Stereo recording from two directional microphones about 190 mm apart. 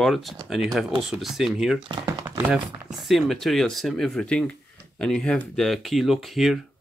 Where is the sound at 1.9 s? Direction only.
20° right (ahead or behind).